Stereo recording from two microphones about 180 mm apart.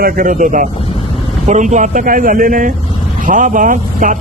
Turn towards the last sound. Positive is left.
turn(degrees=-45)  # may be behind; listen again after turning